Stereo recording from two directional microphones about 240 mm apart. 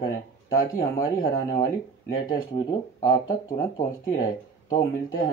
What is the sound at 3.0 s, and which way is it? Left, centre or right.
Speech, centre.